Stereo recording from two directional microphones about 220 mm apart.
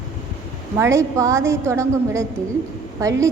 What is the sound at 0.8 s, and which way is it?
A woman's voice, 15° right (ahead or behind).